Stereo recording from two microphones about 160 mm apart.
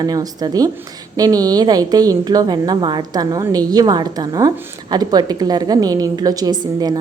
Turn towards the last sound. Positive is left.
turn(degrees=-25)  # may be behind; listen again after turning